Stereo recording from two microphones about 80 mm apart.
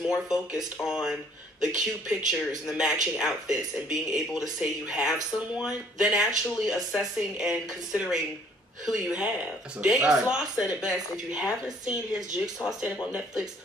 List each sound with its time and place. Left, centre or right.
0.3 s speech: centre